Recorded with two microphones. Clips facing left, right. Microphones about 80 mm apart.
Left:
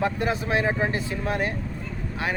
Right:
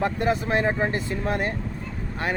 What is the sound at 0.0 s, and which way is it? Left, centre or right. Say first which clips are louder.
Speech: right 2 dB; right.